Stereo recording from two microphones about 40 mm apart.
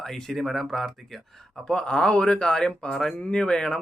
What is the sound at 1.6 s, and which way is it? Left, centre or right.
A man's voice, left.